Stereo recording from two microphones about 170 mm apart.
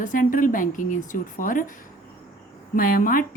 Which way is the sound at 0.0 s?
50° left (ahead or behind).